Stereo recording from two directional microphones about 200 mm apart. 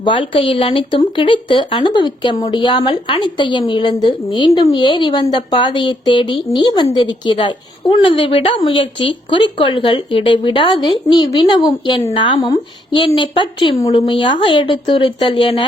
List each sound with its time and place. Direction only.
0.0 s speech: 25° left (ahead or behind)